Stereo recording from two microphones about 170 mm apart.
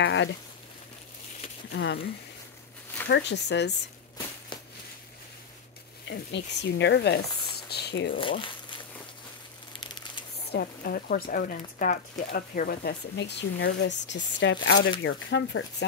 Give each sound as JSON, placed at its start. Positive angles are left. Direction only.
{"t": 0.0, "sound": "speech", "side_deg": 90}
{"t": 1.7, "sound": "speech", "side_deg": 90}
{"t": 3.1, "sound": "speech", "side_deg": 90}
{"t": 6.0, "sound": "speech", "side_deg": 85}
{"t": 8.2, "sound": "speech", "side_deg": 30}
{"t": 9.7, "sound": "a sound", "side_deg": 25}
{"t": 10.5, "sound": "a woman's voice", "side_deg": 65}